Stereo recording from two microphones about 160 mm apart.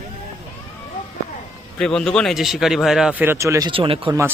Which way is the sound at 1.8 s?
5° left (ahead or behind).